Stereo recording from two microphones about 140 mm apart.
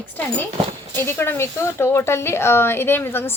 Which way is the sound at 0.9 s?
15° left (ahead or behind).